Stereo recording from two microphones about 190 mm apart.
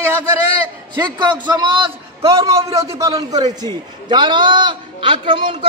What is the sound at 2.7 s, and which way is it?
A man's voice, 15° right (ahead or behind).